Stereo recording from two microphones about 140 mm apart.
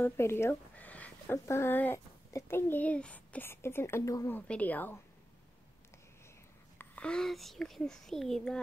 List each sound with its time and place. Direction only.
0.0 s speech: 15° left (ahead or behind)
4.3 s a woman's voice: 10° left (ahead or behind)
6.8 s a child's voice: 10° left (ahead or behind)